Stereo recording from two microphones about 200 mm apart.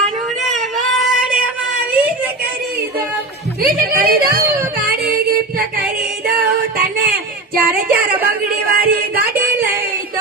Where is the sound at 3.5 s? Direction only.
50° right (ahead or behind).